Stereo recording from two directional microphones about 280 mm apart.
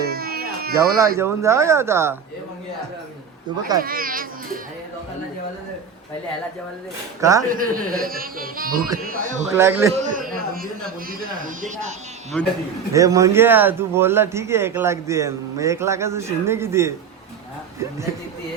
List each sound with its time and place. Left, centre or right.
0.1 s a sound: right
0.8 s speech: centre
3.8 s speech: right
7.2 s speech: centre
7.5 s speech: right
9.5 s speech: centre
9.9 s a man's voice: right
12.9 s speech: centre